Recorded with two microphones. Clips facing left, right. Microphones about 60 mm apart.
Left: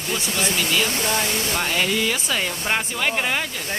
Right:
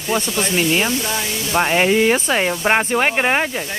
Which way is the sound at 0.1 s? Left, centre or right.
Right.